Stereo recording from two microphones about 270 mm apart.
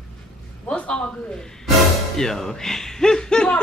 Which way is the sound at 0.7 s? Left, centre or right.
Centre.